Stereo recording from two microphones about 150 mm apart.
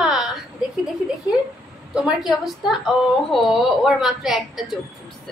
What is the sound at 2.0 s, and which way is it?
A woman's voice, centre (ahead or behind).